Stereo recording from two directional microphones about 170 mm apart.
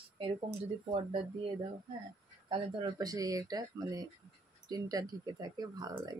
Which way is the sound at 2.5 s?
25° right (ahead or behind).